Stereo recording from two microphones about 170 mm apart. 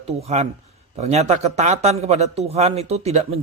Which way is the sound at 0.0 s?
40° right (ahead or behind).